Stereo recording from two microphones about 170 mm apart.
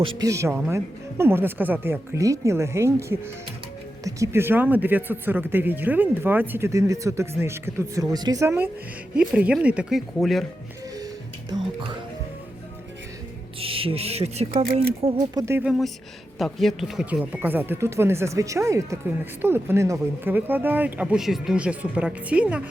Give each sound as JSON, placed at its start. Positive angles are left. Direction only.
{"t": 0.0, "sound": "speech", "side_deg": -20}
{"t": 11.5, "sound": "speech", "side_deg": -30}
{"t": 13.6, "sound": "speech", "side_deg": -35}
{"t": 15.0, "sound": "speech", "side_deg": -20}
{"t": 15.6, "sound": "speech", "side_deg": 0}